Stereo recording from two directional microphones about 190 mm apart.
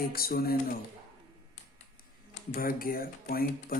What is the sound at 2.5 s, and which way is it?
Speech, 50° left (ahead or behind).